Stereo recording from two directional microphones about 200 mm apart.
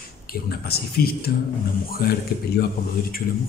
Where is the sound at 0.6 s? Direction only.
50° left (ahead or behind).